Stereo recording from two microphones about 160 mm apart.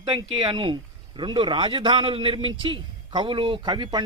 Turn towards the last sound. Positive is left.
turn(degrees=-30)  # may be behind; listen again after turning